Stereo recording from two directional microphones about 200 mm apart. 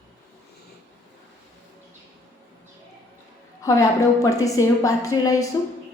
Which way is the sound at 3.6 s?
15° left (ahead or behind).